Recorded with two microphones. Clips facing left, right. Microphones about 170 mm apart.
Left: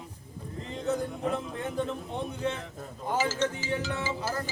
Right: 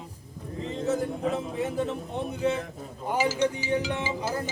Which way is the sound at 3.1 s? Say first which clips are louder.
Right 3 dB; 15° right (ahead or behind).